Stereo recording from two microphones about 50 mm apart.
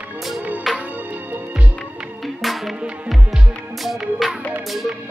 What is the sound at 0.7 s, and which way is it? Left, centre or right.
Music, centre.